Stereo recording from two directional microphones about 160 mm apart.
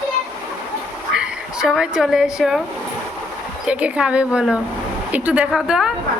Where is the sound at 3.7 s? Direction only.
10° right (ahead or behind).